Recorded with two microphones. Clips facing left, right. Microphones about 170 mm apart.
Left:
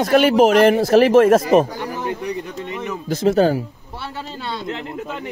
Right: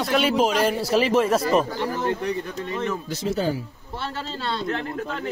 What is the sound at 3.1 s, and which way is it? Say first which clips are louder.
Speech: left 13 dB; 55° left (ahead or behind).